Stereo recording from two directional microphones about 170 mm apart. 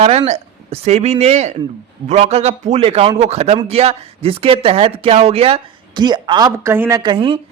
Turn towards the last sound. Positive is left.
turn(degrees=-30)  # may be behind; listen again after turning